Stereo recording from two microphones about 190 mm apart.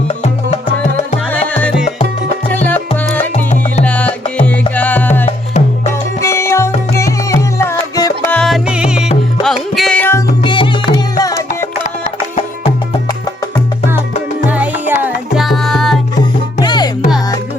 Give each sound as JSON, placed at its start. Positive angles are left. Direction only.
{"t": 0.1, "sound": "music", "side_deg": 35}
{"t": 1.3, "sound": "music", "side_deg": 10}
{"t": 3.3, "sound": "music", "side_deg": 35}
{"t": 3.8, "sound": "music", "side_deg": 5}
{"t": 8.3, "sound": "music", "side_deg": 0}
{"t": 10.4, "sound": "music", "side_deg": 25}
{"t": 11.8, "sound": "music", "side_deg": 35}
{"t": 14.4, "sound": "music", "side_deg": -10}
{"t": 16.6, "sound": "music", "side_deg": 20}